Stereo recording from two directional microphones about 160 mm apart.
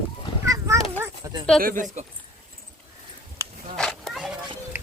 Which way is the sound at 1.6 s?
55° right (ahead or behind).